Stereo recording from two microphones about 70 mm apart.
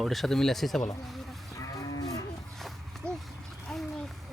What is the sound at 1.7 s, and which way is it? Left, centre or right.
Moo, left.